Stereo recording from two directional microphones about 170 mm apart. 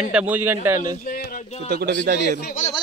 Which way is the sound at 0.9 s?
55° left (ahead or behind).